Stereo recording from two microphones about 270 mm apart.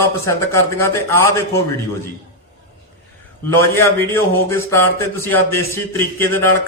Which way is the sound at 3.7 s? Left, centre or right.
Centre.